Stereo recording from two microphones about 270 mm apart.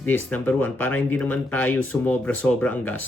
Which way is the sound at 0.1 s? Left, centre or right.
Centre.